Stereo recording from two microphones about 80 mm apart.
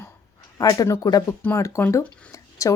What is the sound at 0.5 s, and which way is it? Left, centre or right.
Speech, left.